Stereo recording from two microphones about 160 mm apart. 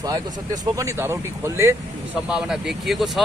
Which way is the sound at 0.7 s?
15° right (ahead or behind).